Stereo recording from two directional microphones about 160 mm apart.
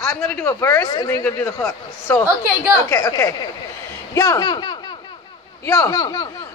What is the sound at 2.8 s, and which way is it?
Speech, 20° left (ahead or behind).